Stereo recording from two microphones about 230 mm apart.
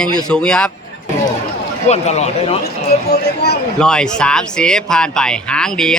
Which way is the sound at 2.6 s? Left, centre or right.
Left.